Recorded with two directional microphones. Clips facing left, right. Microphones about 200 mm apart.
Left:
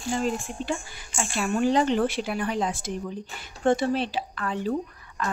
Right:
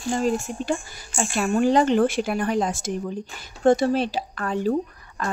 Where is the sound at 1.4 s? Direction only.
50° right (ahead or behind).